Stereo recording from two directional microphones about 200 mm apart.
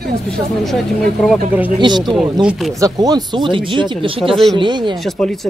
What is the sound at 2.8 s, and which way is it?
Speech, 20° right (ahead or behind).